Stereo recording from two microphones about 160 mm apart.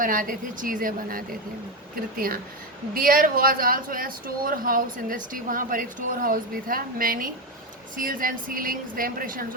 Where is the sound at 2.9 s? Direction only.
65° right (ahead or behind).